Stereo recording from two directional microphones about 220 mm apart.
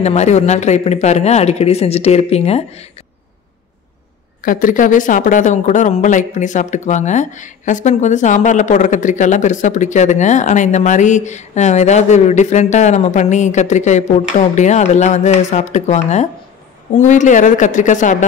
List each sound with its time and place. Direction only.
0.0 s speech: 30° left (ahead or behind)
4.4 s speech: 40° left (ahead or behind)